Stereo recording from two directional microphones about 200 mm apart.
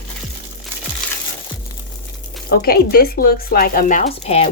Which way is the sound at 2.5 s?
50° left (ahead or behind).